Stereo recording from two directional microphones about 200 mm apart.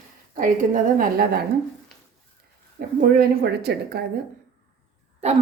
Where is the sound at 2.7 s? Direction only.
50° right (ahead or behind).